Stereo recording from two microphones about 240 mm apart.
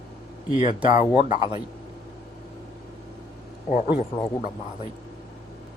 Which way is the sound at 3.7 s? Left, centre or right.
Left.